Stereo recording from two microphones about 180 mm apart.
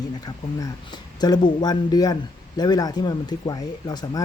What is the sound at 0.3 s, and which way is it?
Speech, 20° left (ahead or behind).